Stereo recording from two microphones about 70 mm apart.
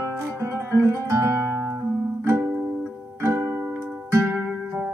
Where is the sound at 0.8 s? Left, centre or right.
Right.